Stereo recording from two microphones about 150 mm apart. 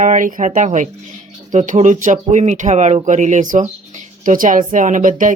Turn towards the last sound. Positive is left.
turn(degrees=-60)  # may be behind; listen again after turning